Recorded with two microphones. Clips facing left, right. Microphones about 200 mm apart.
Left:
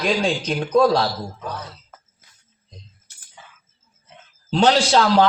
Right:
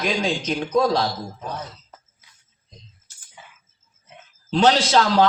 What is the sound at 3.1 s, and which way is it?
Music, 65° left (ahead or behind).